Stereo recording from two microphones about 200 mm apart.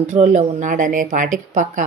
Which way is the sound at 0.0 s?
35° right (ahead or behind).